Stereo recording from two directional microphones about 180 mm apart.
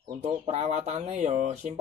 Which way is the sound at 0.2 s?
35° right (ahead or behind).